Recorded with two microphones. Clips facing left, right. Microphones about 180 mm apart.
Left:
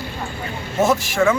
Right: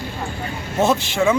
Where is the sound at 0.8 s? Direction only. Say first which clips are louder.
Left 1 dB; 10° right (ahead or behind).